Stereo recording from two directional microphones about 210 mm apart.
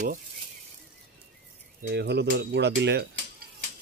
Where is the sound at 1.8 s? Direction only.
55° right (ahead or behind).